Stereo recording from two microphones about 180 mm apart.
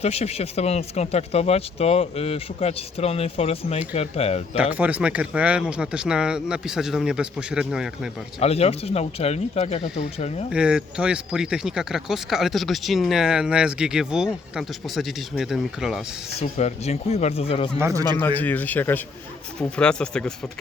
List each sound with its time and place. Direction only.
0.0 s speech: 35° left (ahead or behind)
4.7 s speech: 5° right (ahead or behind)
8.4 s speech: 35° left (ahead or behind)
10.5 s speech: 5° right (ahead or behind)
16.4 s speech: 35° left (ahead or behind)
17.7 s speech: 15° right (ahead or behind)
18.2 s speech: 10° left (ahead or behind)